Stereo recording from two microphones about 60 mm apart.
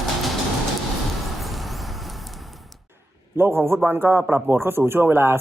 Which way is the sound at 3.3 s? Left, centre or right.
Right.